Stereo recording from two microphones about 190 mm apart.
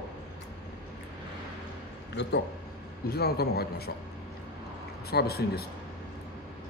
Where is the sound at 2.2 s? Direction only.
60° left (ahead or behind).